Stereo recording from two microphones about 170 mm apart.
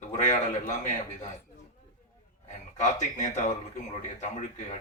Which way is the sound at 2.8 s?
45° left (ahead or behind).